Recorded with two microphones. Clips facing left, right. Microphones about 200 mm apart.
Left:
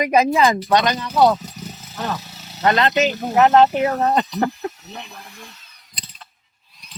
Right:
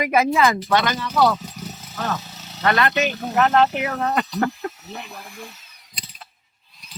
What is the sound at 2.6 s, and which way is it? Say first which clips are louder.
Speech: left 3 dB; 20° left (ahead or behind).